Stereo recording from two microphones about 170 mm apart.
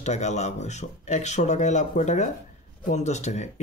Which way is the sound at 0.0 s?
40° left (ahead or behind).